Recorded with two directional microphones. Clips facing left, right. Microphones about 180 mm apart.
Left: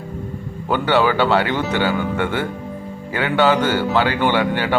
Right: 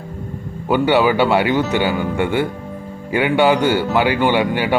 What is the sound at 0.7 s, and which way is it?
Speech, 10° right (ahead or behind).